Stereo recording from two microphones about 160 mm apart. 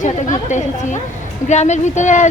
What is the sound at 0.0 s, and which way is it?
A woman's voice, 50° left (ahead or behind).